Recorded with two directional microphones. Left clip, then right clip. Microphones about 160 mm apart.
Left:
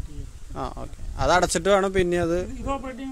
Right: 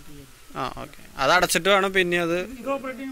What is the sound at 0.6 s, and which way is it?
Speech, 15° left (ahead or behind).